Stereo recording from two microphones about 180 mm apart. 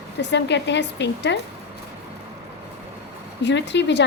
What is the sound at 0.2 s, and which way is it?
Speech, 75° left (ahead or behind).